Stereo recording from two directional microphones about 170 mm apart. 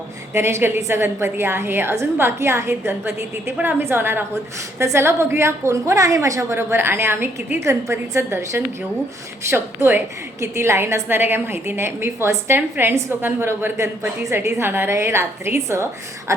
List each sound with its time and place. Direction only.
0.3 s a woman's voice: 15° right (ahead or behind)